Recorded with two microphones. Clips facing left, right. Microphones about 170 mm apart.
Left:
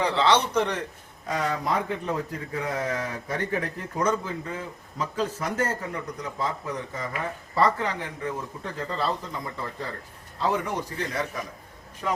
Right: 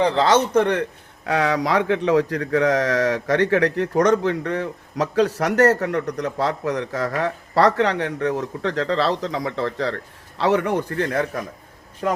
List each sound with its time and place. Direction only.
0.0 s a man's voice: 40° right (ahead or behind)